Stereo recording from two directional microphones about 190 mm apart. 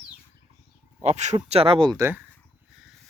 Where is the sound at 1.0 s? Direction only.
35° right (ahead or behind); by 2.2 s 15° right (ahead or behind).